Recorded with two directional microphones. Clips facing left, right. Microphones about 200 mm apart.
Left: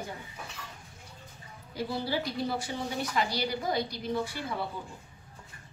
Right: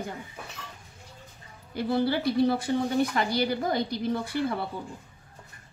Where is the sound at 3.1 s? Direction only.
55° right (ahead or behind).